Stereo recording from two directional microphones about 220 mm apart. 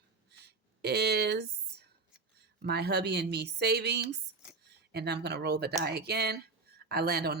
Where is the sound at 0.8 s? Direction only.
45° right (ahead or behind).